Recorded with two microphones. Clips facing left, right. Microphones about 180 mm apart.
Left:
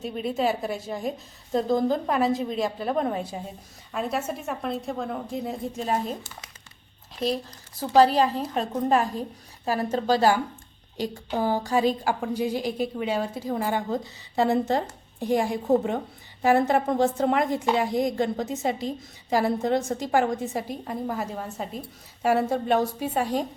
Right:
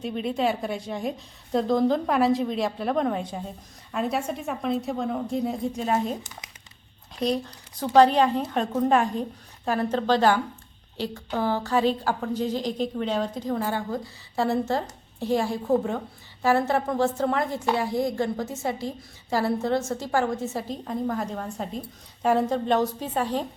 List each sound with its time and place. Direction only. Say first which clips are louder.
0.0 s a woman's voice: even; centre (ahead or behind)
7.2 s a woman's voice: right 1 dB; centre (ahead or behind)